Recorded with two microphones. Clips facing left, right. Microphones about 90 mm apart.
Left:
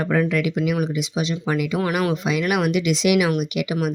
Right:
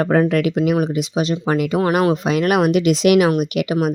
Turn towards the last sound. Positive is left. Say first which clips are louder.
# right 5 dB
turn(degrees=-45)  # may be behind; listen again after turning